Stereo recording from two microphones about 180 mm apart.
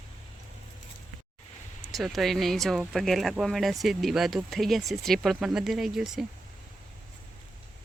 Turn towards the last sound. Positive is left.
turn(degrees=0)  # may be behind; listen again after turning